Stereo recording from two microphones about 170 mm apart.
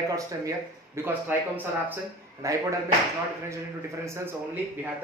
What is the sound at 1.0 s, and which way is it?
Speech, 10° right (ahead or behind).